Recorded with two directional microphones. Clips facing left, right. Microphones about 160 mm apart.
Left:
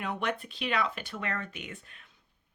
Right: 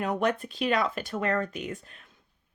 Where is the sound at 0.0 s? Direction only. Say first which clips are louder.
Right 6 dB; 40° right (ahead or behind).